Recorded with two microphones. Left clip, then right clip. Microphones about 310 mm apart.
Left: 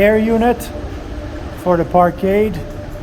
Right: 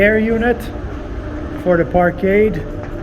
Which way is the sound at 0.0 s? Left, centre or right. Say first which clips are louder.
Left 1 dB; centre.